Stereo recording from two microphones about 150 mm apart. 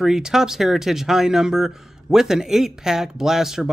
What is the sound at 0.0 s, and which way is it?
Speech, 5° right (ahead or behind).